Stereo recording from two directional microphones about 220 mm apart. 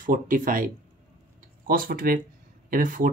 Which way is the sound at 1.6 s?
40° right (ahead or behind).